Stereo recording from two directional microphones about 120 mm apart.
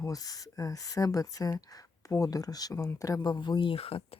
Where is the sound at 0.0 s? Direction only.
30° left (ahead or behind); by 4.2 s 55° left (ahead or behind).